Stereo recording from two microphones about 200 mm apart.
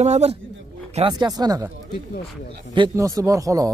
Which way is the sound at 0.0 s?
35° right (ahead or behind).